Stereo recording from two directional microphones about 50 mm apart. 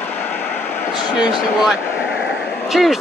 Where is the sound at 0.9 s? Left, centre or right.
Centre.